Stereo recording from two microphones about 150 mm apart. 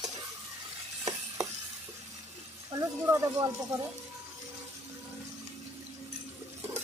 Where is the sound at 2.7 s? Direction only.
20° right (ahead or behind).